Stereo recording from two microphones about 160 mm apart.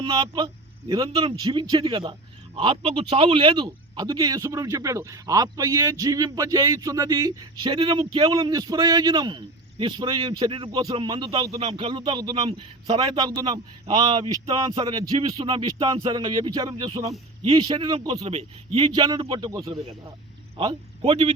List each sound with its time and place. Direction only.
0.0 s a man's voice: 30° right (ahead or behind)
8.3 s a man's voice: 20° right (ahead or behind)
20.6 s speech: 35° right (ahead or behind)